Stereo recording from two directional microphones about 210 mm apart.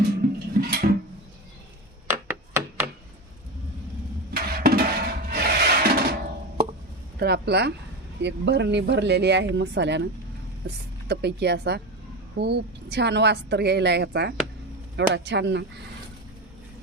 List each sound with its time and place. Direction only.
0.5 s music: 45° right (ahead or behind)
2.0 s chopping: 10° right (ahead or behind)
4.4 s a sound: 45° right (ahead or behind)
7.2 s a woman's voice: 50° right (ahead or behind)
11.1 s a woman's voice: 50° right (ahead or behind)